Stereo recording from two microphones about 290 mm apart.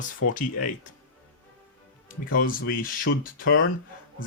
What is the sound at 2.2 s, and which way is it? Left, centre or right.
Speech, left.